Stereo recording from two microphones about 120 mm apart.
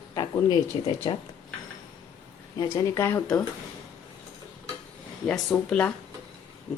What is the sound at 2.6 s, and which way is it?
Speech, 30° left (ahead or behind).